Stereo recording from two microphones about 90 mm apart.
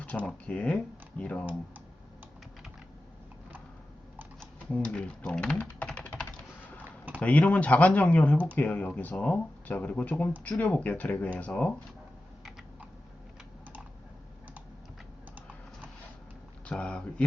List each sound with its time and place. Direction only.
0.4 s speech: 15° left (ahead or behind)
4.7 s speech: 10° left (ahead or behind)
6.8 s a sound: 20° right (ahead or behind)
7.2 s speech: 15° left (ahead or behind)
16.6 s speech: 10° left (ahead or behind)